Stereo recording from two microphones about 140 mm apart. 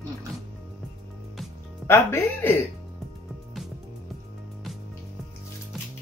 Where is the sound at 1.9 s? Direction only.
15° left (ahead or behind).